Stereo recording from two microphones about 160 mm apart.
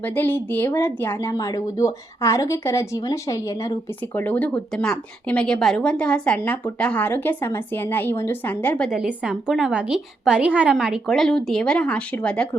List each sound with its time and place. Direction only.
0.0 s a woman's voice: 10° left (ahead or behind)
8.9 s a woman's voice: 5° right (ahead or behind)